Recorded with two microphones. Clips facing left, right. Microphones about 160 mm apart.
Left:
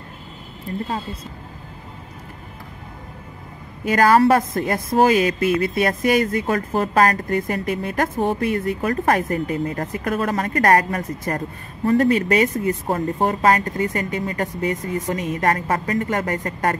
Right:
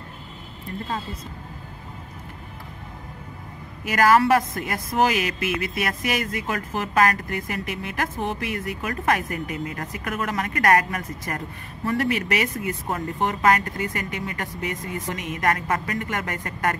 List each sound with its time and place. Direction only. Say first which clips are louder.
3.9 s speech: left 3 dB; 35° left (ahead or behind)